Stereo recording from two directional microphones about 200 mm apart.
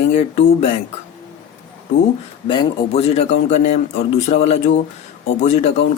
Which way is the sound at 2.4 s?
25° left (ahead or behind).